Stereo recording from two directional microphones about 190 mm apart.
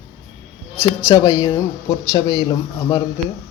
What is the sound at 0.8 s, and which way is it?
A man's voice, 20° left (ahead or behind).